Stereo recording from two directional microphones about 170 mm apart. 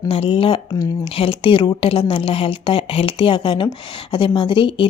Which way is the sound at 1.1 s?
35° left (ahead or behind).